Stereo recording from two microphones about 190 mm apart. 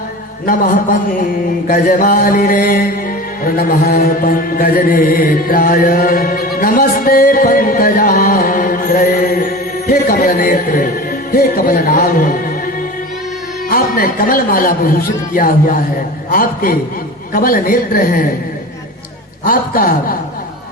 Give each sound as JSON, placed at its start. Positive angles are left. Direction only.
{"t": 0.4, "sound": "a man's voice", "side_deg": 45}
{"t": 3.4, "sound": "mantra", "side_deg": 50}
{"t": 13.7, "sound": "a man's voice", "side_deg": 50}
{"t": 19.5, "sound": "a man's voice", "side_deg": 50}